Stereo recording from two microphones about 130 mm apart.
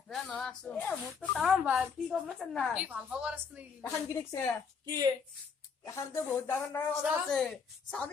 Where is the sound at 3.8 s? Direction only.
20° left (ahead or behind).